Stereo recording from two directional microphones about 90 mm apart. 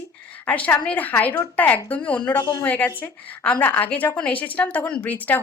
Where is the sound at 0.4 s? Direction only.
15° left (ahead or behind).